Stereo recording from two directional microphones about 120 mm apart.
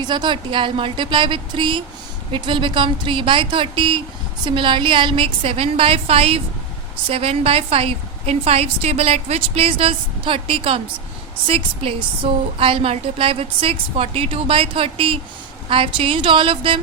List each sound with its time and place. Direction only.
0.0 s a woman's voice: 40° right (ahead or behind)